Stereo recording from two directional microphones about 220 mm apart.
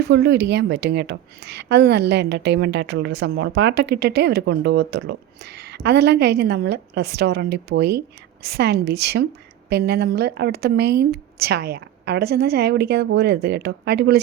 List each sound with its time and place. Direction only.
0.1 s a woman's voice: 50° right (ahead or behind)